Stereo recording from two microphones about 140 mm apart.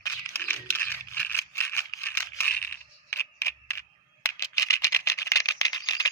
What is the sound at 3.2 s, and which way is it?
Camera, 20° left (ahead or behind).